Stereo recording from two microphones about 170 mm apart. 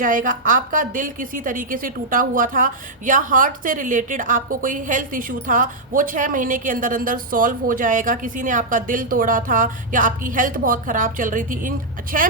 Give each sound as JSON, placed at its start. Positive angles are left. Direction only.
{"t": 0.0, "sound": "a woman's voice", "side_deg": -50}